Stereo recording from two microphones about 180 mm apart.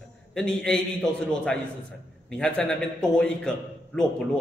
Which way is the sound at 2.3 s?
5° left (ahead or behind).